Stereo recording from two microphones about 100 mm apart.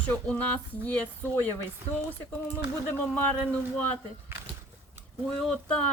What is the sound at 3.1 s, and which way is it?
Speech, 20° left (ahead or behind).